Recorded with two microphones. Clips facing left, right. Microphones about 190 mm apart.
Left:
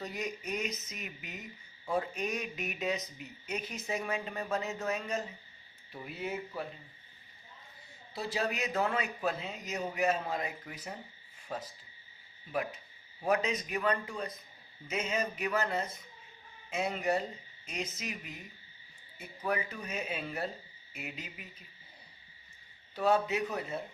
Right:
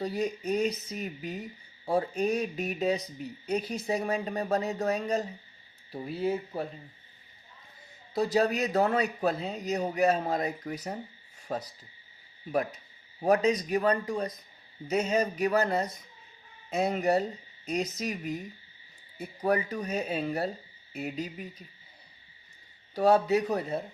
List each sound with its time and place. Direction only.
0.0 s speech: 30° right (ahead or behind)
8.1 s speech: 40° right (ahead or behind)
23.0 s speech: 35° right (ahead or behind)